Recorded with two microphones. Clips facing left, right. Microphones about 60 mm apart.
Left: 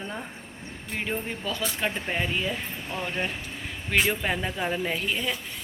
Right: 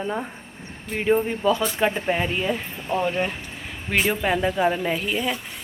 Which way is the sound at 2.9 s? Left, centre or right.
Right.